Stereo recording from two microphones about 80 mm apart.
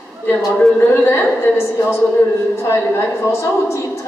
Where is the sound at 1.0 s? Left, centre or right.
Left.